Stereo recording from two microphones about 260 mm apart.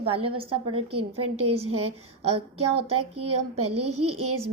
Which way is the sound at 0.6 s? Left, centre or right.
Right.